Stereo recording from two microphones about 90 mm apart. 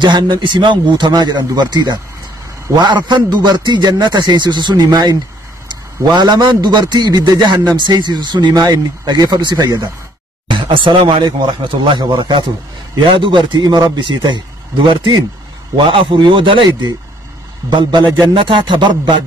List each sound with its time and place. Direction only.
0.0 s a man's voice: 60° right (ahead or behind)
8.6 s speech: 45° right (ahead or behind)
10.5 s a man's voice: 75° right (ahead or behind)